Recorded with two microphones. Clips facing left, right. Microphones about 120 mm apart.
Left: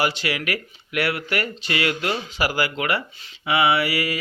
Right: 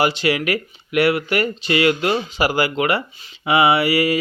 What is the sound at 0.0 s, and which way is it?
Speech, 20° right (ahead or behind).